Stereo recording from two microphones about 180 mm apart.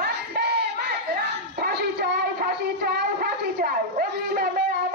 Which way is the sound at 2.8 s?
65° right (ahead or behind).